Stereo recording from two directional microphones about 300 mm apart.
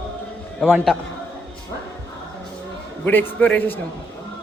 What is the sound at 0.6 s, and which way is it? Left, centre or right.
Speech, centre.